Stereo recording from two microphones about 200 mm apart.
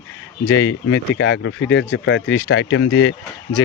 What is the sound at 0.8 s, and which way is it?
Speech, 75° left (ahead or behind).